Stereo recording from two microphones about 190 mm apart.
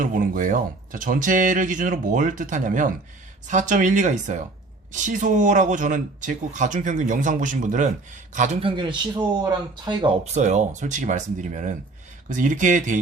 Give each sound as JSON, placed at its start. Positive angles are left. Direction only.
{"t": 0.0, "sound": "a man's voice", "side_deg": -45}
{"t": 8.6, "sound": "speech", "side_deg": -25}
{"t": 10.3, "sound": "speech", "side_deg": -40}